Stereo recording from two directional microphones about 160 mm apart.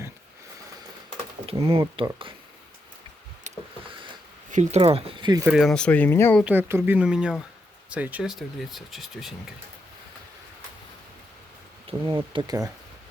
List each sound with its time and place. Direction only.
1.5 s speech: 35° right (ahead or behind)
3.5 s a sound: 45° right (ahead or behind)
4.5 s speech: 45° right (ahead or behind); by 5.4 s 30° right (ahead or behind)
5.5 s speech: 5° left (ahead or behind)
6.4 s speech: 10° right (ahead or behind)
11.9 s speech: 30° right (ahead or behind)